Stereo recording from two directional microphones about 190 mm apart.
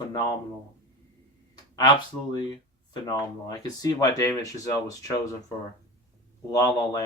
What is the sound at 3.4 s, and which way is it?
Speech, 20° left (ahead or behind).